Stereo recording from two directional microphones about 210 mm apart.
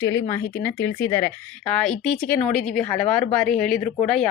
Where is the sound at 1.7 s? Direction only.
5° left (ahead or behind).